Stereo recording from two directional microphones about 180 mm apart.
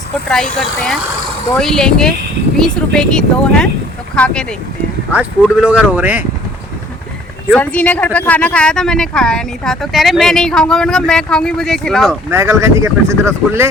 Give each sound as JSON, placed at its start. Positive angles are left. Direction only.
{"t": 0.3, "sound": "speech", "side_deg": 0}
{"t": 7.5, "sound": "speech", "side_deg": 10}
{"t": 12.3, "sound": "speech", "side_deg": -15}